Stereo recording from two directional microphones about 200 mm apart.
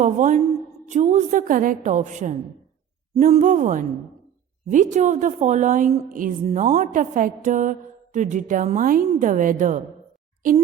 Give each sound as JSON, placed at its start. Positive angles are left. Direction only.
{"t": 0.0, "sound": "a woman's voice", "side_deg": -40}